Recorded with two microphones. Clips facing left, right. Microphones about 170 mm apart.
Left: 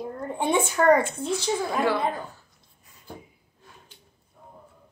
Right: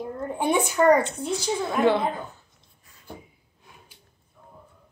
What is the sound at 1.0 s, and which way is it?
Speech, 25° right (ahead or behind).